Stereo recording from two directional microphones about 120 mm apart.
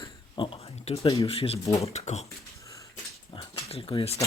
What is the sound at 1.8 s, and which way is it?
Speech, 70° left (ahead or behind).